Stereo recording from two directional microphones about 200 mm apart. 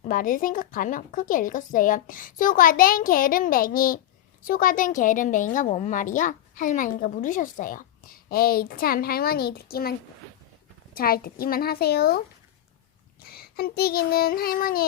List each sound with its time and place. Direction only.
0.1 s a woman's voice: 45° left (ahead or behind)
10.9 s a woman's voice: 50° left (ahead or behind)
13.3 s a woman's voice: 50° left (ahead or behind)